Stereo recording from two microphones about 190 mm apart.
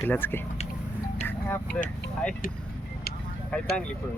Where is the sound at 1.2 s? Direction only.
10° left (ahead or behind).